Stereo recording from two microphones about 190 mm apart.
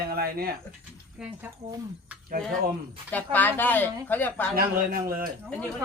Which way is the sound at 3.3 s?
10° left (ahead or behind).